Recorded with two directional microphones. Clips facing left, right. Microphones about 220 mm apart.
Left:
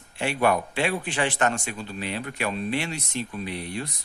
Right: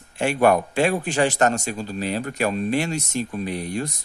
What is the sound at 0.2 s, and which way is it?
A man's voice, 45° right (ahead or behind).